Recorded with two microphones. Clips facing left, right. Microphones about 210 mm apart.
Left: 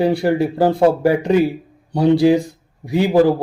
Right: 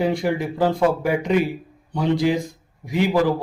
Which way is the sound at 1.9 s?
65° left (ahead or behind).